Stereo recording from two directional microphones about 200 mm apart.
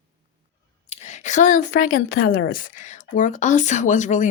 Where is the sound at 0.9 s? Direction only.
35° left (ahead or behind).